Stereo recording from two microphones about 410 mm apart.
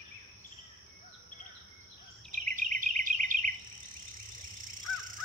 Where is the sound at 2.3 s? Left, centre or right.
Centre.